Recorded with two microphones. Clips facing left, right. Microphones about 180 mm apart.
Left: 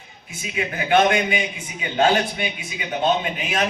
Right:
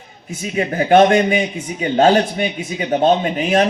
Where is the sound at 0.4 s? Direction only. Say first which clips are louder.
Right 8 dB; 45° right (ahead or behind).